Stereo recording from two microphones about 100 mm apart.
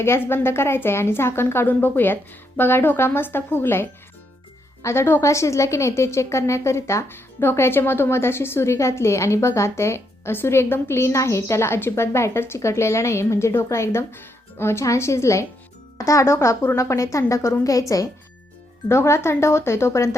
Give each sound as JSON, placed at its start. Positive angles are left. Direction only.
{"t": 0.0, "sound": "a woman's voice", "side_deg": 25}